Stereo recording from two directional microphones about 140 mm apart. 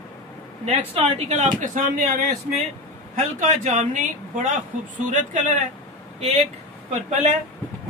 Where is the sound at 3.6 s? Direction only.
55° right (ahead or behind).